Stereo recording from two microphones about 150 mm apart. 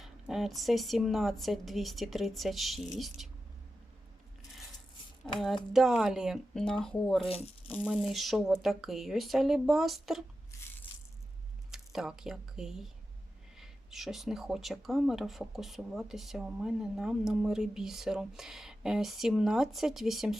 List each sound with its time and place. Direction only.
0.0 s speech: centre (ahead or behind)
5.7 s speech: centre (ahead or behind)
10.5 s a sound: 20° left (ahead or behind)
11.7 s speech: 5° right (ahead or behind)